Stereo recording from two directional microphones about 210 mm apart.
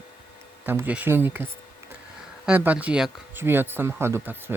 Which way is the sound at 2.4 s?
5° right (ahead or behind).